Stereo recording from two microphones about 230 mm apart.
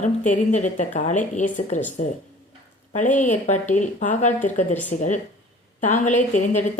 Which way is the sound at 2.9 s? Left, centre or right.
Left.